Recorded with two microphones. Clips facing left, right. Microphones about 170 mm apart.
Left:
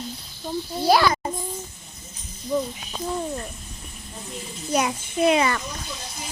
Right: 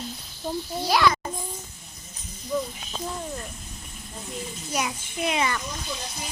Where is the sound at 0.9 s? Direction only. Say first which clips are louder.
Left 3 dB; 35° left (ahead or behind).